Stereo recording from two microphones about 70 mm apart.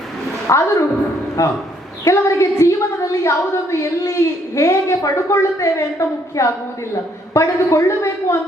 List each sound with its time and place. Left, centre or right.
0.4 s a woman's voice: left